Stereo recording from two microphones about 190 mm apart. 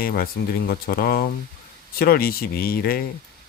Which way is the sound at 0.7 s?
55° left (ahead or behind).